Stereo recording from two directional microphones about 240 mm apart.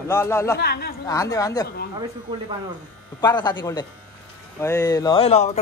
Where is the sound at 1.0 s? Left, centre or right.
Centre.